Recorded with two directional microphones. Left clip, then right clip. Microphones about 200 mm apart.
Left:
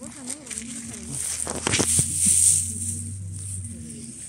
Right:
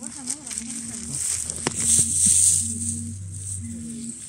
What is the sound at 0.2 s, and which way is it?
Insect, 20° left (ahead or behind).